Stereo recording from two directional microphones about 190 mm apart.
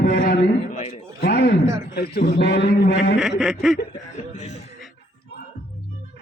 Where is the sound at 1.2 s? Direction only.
55° left (ahead or behind).